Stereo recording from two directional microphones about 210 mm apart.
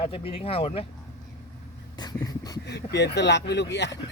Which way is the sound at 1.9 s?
20° left (ahead or behind).